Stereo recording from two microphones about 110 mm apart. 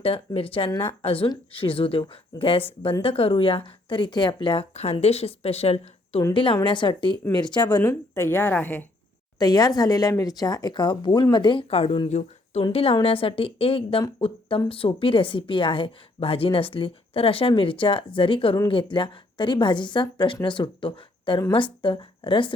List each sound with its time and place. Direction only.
0.3 s a woman's voice: 55° left (ahead or behind)
4.7 s speech: 70° left (ahead or behind)
6.3 s a woman's voice: 50° left (ahead or behind)
7.8 s a woman's voice: 20° left (ahead or behind)
9.4 s speech: 35° left (ahead or behind)
11.7 s a woman's voice: 65° left (ahead or behind)
12.0 s speech: 90° left
12.7 s a woman's voice: 60° left (ahead or behind)